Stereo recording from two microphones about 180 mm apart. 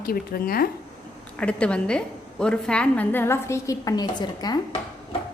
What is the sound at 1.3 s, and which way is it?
A woman's voice, 5° left (ahead or behind).